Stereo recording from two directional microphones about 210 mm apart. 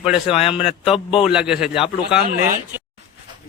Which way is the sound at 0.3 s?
30° left (ahead or behind).